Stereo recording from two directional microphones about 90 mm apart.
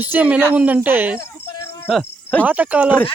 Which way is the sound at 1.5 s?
35° left (ahead or behind).